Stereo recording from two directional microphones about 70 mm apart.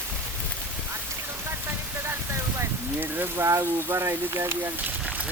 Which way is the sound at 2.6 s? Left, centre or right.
Right.